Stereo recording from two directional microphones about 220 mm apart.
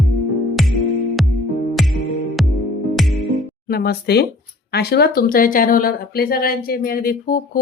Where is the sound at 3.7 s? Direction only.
45° left (ahead or behind).